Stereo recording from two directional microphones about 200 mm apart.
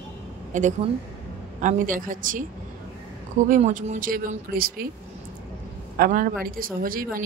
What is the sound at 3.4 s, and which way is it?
Speech, 40° right (ahead or behind).